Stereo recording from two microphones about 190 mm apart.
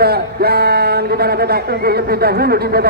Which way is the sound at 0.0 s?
55° right (ahead or behind).